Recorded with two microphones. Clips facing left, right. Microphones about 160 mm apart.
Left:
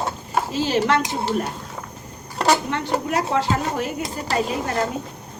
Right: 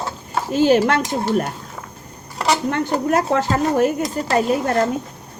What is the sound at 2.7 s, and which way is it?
Speech, 50° right (ahead or behind).